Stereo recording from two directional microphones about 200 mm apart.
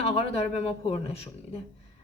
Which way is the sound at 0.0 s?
30° left (ahead or behind).